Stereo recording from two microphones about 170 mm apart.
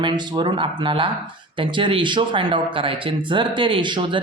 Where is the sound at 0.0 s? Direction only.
25° right (ahead or behind).